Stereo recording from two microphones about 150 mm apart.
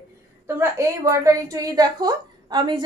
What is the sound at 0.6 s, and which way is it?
A woman's voice, 20° right (ahead or behind).